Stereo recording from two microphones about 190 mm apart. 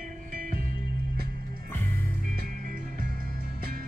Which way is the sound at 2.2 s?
45° right (ahead or behind).